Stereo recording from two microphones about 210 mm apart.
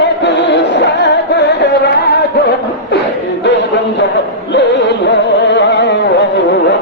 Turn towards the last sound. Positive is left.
turn(degrees=55)  # may be behind; listen again after turning